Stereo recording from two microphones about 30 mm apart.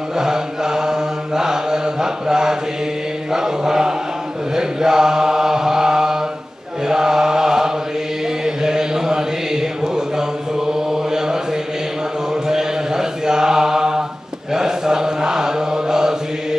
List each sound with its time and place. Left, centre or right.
0.2 s mantra: centre
4.6 s chant: centre
8.5 s mantra: centre
12.4 s mantra: centre